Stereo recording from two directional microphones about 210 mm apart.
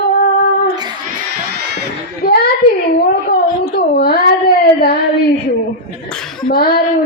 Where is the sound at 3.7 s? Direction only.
45° left (ahead or behind).